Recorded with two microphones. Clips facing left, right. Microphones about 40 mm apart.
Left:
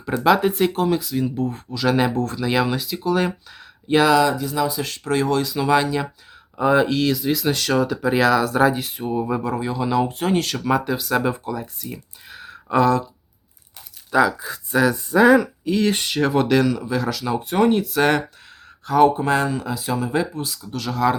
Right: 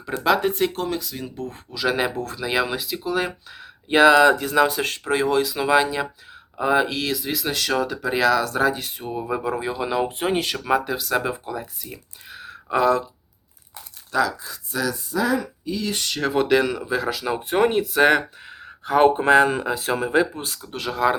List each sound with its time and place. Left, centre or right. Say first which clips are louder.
0.2 s speech: left 3 dB; centre
3.8 s speech: right 2 dB; centre
4.1 s speech: right 3 dB; right
4.4 s speech: right 3 dB; right
5.0 s speech: left 1 dB; centre
9.4 s speech: left 1 dB; centre
14.1 s speech: left 4 dB; centre
14.4 s speech: left 7 dB; left
15.1 s speech: left 9 dB; left
15.4 s speech: left 7 dB; left
16.0 s speech: left 2 dB; centre; by 21.2 s right